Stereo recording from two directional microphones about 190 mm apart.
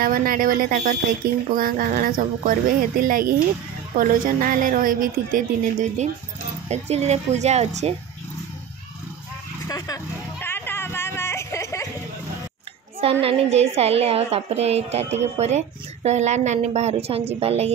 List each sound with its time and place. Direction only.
0.0 s a woman's voice: 50° right (ahead or behind)
9.7 s a sound: 20° left (ahead or behind)
13.0 s a woman's voice: 30° right (ahead or behind)